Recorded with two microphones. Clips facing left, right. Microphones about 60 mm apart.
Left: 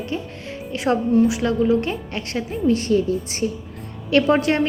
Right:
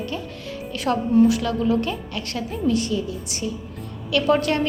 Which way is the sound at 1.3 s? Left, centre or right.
Left.